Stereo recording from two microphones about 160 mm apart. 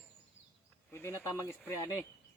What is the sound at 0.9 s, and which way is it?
Speech, 15° left (ahead or behind).